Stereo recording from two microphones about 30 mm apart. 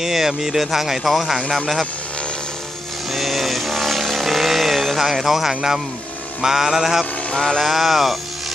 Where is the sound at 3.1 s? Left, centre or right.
Centre.